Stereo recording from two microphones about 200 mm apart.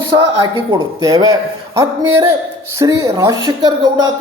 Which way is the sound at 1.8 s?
15° right (ahead or behind).